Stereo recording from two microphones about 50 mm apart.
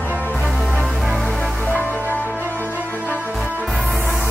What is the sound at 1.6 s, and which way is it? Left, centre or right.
Music, left.